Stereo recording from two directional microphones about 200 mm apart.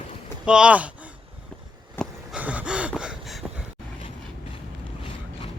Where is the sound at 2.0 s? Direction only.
10° left (ahead or behind).